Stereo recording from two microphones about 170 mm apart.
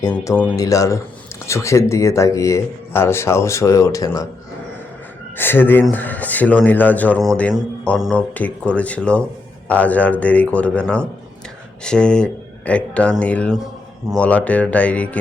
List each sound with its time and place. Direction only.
0.1 s speech: 10° left (ahead or behind)
0.5 s speech: 20° left (ahead or behind)
5.4 s speech: 10° left (ahead or behind)
7.9 s speech: centre (ahead or behind)